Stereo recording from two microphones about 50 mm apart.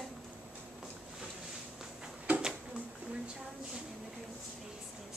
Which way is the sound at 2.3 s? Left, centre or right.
Right.